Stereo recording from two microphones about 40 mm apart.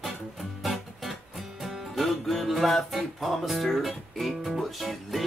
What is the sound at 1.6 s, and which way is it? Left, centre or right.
Music, centre.